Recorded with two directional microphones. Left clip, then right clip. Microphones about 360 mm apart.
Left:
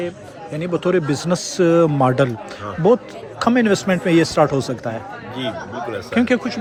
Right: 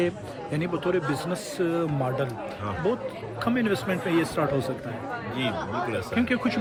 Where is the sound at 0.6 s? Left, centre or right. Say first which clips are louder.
Left 8 dB; centre.